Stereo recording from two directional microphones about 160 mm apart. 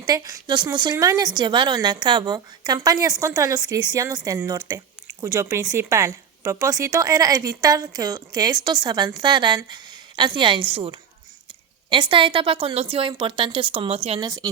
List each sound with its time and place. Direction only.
0.0 s a woman's voice: 25° right (ahead or behind); by 14.2 s 40° right (ahead or behind)
14.2 s a woman's voice: 20° right (ahead or behind)